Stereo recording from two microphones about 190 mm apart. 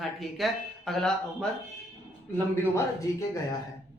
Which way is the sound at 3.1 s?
20° left (ahead or behind).